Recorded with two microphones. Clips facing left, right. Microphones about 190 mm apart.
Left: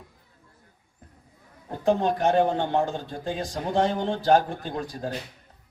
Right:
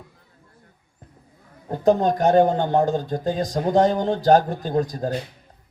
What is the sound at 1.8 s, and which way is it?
Speech, 40° right (ahead or behind).